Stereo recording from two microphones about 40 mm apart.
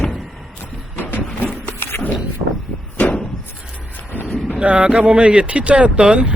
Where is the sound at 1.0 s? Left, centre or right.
Left.